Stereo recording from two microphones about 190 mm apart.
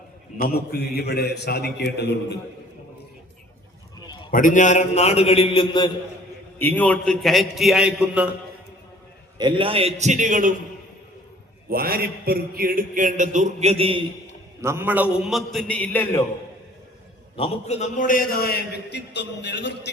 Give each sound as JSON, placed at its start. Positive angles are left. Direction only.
{"t": 0.3, "sound": "a man's voice", "side_deg": 55}
{"t": 4.0, "sound": "a sound", "side_deg": 25}
{"t": 4.3, "sound": "a man's voice", "side_deg": 45}
{"t": 6.6, "sound": "a man's voice", "side_deg": 10}
{"t": 9.4, "sound": "a man's voice", "side_deg": -25}
{"t": 11.7, "sound": "a man's voice", "side_deg": -50}
{"t": 14.6, "sound": "a man's voice", "side_deg": -15}
{"t": 17.3, "sound": "a man's voice", "side_deg": 35}